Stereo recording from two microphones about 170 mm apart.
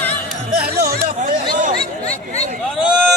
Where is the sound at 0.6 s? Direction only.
65° right (ahead or behind).